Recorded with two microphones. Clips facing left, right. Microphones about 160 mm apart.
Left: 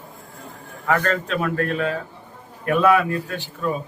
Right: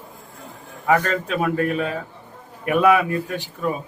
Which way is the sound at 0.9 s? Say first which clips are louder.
Right 2 dB; 15° right (ahead or behind).